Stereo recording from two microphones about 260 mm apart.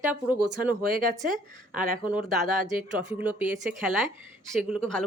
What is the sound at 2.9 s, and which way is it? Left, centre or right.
Speech, centre.